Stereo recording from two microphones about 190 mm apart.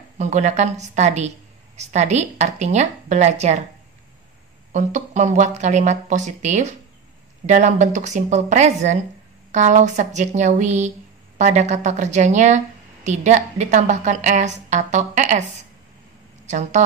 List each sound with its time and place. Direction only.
0.2 s a woman's voice: 40° right (ahead or behind)
4.7 s a woman's voice: 40° right (ahead or behind)
16.4 s a woman's voice: 40° right (ahead or behind)